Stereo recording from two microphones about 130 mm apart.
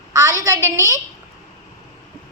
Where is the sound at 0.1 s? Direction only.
25° right (ahead or behind).